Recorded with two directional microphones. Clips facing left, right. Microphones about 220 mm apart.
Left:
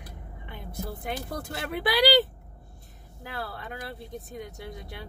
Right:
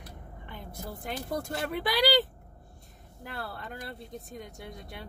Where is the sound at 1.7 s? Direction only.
5° left (ahead or behind).